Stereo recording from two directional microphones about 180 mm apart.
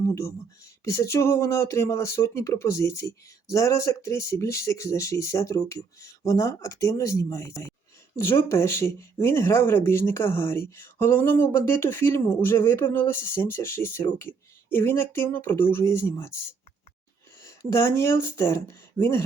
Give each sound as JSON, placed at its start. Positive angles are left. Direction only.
{"t": 0.1, "sound": "speech", "side_deg": 15}